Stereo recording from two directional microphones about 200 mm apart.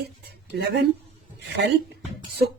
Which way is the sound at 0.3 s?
55° right (ahead or behind).